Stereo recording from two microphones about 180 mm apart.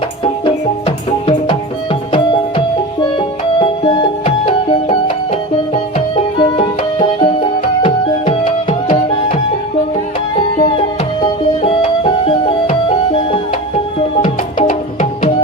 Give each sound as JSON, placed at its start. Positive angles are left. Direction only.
{"t": 0.4, "sound": "music", "side_deg": 25}
{"t": 10.6, "sound": "music", "side_deg": 30}